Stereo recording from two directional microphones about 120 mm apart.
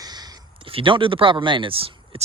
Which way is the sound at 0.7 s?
45° right (ahead or behind).